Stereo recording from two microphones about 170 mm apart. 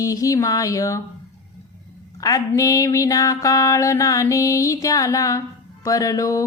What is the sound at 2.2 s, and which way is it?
Speech, 20° left (ahead or behind).